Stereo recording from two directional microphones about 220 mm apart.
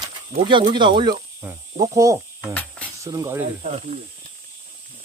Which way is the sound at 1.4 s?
10° right (ahead or behind).